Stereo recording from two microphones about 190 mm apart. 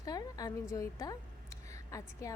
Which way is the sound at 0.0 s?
20° left (ahead or behind).